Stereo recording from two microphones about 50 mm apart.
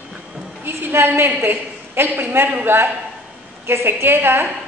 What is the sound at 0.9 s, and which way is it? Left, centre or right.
A man's voice, right.